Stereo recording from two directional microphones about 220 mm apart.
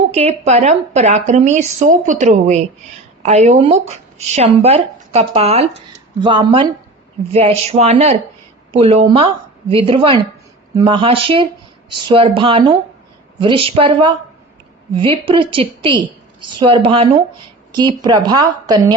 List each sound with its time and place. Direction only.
0.1 s a woman's voice: 30° right (ahead or behind)